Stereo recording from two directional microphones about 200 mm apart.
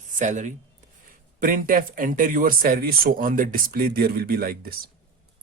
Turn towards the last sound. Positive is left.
turn(degrees=-45)  # may be behind; listen again after turning